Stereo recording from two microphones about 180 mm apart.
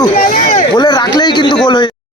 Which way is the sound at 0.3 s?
45° left (ahead or behind).